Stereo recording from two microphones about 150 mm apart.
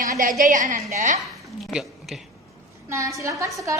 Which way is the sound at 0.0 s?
65° right (ahead or behind).